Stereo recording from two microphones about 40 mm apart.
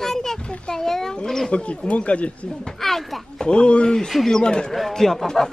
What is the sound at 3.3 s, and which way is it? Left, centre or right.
Speech, left.